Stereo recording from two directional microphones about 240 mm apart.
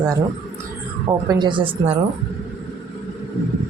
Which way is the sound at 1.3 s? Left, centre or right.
Centre.